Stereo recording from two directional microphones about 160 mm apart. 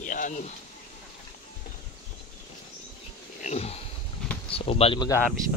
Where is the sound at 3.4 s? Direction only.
40° left (ahead or behind).